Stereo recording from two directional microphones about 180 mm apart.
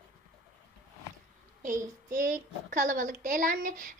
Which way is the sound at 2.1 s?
45° right (ahead or behind).